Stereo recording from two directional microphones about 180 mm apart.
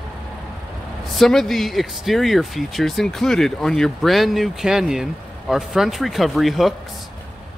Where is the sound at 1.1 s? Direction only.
Centre (ahead or behind).